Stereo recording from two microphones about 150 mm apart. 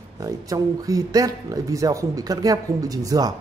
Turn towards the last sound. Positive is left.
turn(degrees=-25)  # may be behind; listen again after turning